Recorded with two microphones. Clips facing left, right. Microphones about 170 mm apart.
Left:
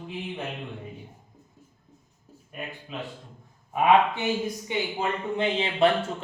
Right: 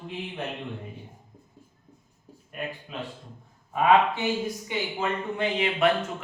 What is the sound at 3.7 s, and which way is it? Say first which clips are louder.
Speech: even; 20° left (ahead or behind).